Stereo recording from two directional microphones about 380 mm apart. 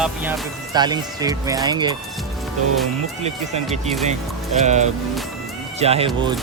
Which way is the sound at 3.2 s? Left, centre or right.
Centre.